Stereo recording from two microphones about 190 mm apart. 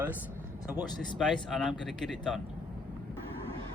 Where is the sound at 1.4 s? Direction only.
Centre (ahead or behind).